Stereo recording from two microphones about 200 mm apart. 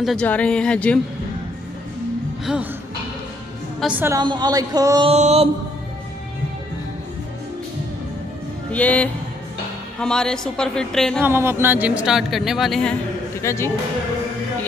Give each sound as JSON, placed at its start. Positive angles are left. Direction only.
{"t": 0.0, "sound": "speech", "side_deg": 5}
{"t": 2.4, "sound": "speech", "side_deg": -5}
{"t": 3.8, "sound": "a woman's voice", "side_deg": -10}
{"t": 4.2, "sound": "speech", "side_deg": -20}
{"t": 5.1, "sound": "mantra", "side_deg": -30}
{"t": 8.7, "sound": "speech", "side_deg": 5}
{"t": 11.2, "sound": "speech", "side_deg": -10}
{"t": 13.4, "sound": "speech", "side_deg": 15}